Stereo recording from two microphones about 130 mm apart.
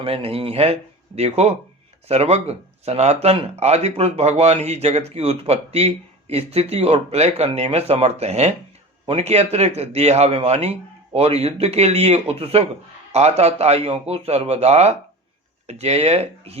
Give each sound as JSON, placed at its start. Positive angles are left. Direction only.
{"t": 0.0, "sound": "a man's voice", "side_deg": -45}